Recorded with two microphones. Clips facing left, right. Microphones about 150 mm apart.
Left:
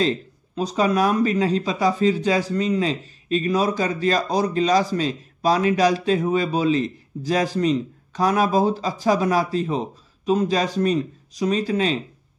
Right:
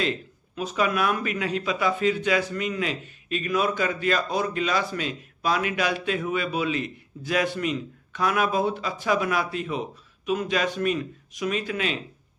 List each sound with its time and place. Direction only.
0.0 s speech: 35° left (ahead or behind)